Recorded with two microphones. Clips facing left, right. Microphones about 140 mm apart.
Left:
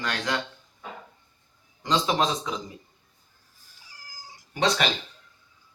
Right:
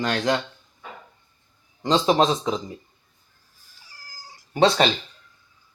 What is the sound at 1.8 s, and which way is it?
Speech, 25° right (ahead or behind).